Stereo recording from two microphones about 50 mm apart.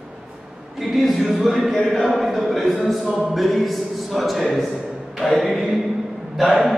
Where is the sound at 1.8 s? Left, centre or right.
Centre.